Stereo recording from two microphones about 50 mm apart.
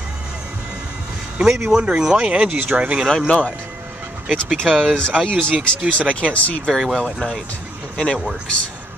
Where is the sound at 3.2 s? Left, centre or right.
Left.